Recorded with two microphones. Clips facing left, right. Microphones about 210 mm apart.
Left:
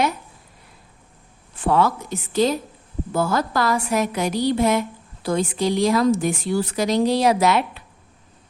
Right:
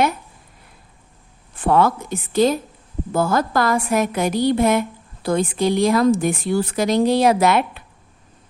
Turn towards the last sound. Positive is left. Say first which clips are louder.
# right 2 dB
turn(degrees=-55)  # may be behind; listen again after turning